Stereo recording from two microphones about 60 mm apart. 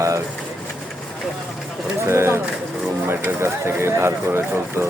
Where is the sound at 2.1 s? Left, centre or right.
Right.